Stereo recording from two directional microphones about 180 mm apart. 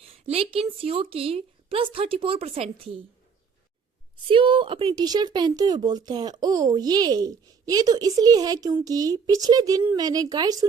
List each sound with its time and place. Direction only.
0.0 s a woman's voice: 35° right (ahead or behind)
4.3 s speech: 30° right (ahead or behind)